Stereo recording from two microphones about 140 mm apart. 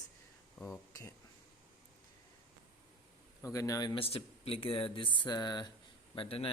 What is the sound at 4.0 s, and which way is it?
Speech, 45° left (ahead or behind).